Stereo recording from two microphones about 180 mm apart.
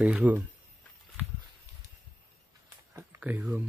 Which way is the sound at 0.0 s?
10° right (ahead or behind).